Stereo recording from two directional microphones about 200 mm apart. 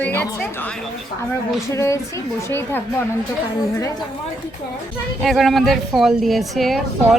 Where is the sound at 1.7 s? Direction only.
15° left (ahead or behind).